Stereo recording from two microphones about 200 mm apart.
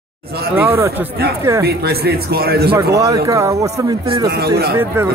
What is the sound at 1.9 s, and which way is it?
Speech, 50° right (ahead or behind).